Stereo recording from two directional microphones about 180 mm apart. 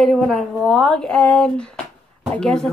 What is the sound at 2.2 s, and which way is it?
Speech, 5° left (ahead or behind).